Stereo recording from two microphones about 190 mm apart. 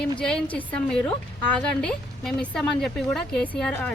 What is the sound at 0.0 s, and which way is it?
A woman's voice, 5° left (ahead or behind).